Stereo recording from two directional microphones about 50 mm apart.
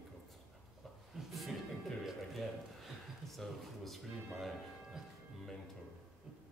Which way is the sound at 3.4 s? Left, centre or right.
Centre.